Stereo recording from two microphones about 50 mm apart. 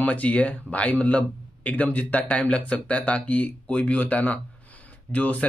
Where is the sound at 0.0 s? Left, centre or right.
Left.